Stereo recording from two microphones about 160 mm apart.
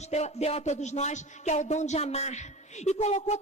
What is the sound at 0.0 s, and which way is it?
Music, 45° left (ahead or behind).